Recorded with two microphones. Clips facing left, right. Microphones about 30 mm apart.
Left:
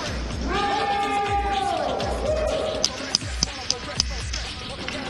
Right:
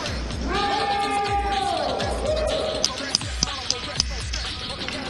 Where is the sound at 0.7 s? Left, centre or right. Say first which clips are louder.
Even; right.